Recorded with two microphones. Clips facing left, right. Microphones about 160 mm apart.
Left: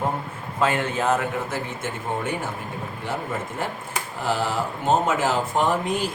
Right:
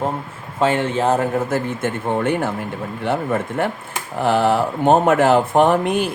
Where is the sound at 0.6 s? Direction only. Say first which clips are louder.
Right 5 dB; 30° right (ahead or behind).